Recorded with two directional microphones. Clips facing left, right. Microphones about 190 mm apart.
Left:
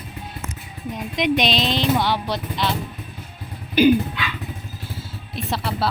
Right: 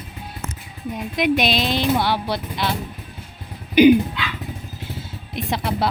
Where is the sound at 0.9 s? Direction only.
5° right (ahead or behind).